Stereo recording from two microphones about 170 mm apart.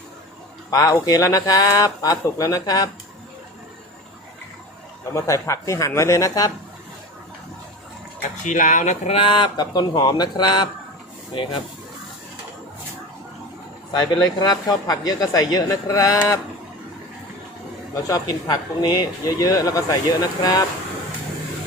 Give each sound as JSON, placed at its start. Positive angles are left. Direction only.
{"t": 0.7, "sound": "a man's voice", "side_deg": 20}
{"t": 5.1, "sound": "speech", "side_deg": 15}
{"t": 8.4, "sound": "a man's voice", "side_deg": 50}
{"t": 13.9, "sound": "a man's voice", "side_deg": 25}
{"t": 17.9, "sound": "a man's voice", "side_deg": 20}